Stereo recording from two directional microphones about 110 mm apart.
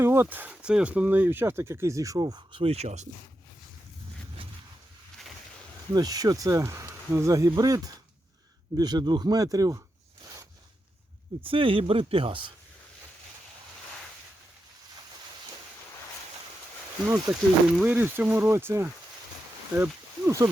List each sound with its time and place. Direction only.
0.0 s speech: 20° right (ahead or behind); by 2.6 s 40° right (ahead or behind)
2.6 s speech: 65° right (ahead or behind); by 3.1 s 85° right
5.9 s speech: 35° right (ahead or behind)
11.3 s speech: 55° right (ahead or behind)
17.3 s speech: 25° right (ahead or behind)
17.8 s speech: 15° right (ahead or behind)